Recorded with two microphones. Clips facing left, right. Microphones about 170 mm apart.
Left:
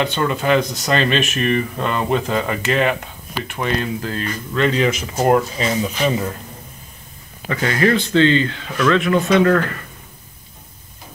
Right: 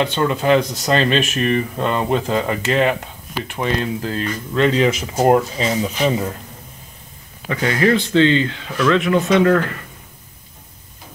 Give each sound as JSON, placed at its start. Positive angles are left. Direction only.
{"t": 0.0, "sound": "speech", "side_deg": -30}
{"t": 5.7, "sound": "speech", "side_deg": -20}
{"t": 7.4, "sound": "speech", "side_deg": -15}